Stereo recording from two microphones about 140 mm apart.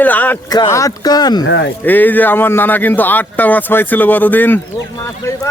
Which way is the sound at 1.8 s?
15° left (ahead or behind).